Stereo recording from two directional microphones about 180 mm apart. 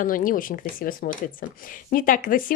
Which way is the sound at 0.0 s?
50° left (ahead or behind).